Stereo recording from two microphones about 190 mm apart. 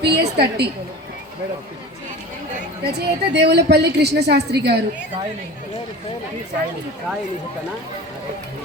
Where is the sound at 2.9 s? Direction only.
60° right (ahead or behind).